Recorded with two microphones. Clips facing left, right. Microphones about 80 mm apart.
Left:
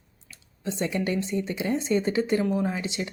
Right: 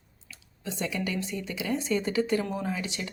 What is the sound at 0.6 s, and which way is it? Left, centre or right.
Speech, left.